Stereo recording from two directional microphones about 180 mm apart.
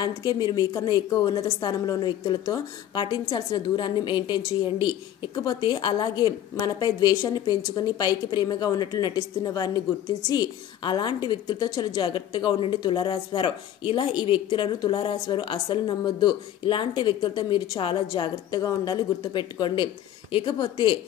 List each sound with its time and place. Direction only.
0.0 s a woman's voice: 25° left (ahead or behind)